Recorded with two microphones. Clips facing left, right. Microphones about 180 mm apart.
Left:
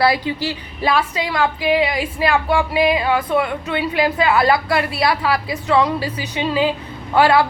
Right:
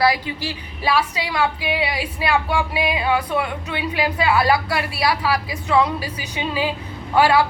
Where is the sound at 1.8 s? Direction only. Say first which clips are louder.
Left 5 dB; 10° right (ahead or behind).